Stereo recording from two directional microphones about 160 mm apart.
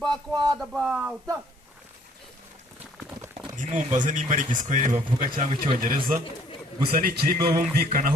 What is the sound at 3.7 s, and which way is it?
Speech, 55° right (ahead or behind).